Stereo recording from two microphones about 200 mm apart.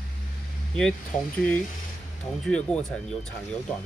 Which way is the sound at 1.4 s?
5° left (ahead or behind).